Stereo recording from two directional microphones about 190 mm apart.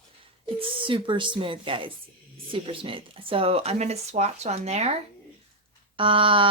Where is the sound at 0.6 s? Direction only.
25° right (ahead or behind).